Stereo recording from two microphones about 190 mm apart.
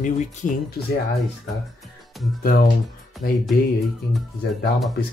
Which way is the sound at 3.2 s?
50° left (ahead or behind).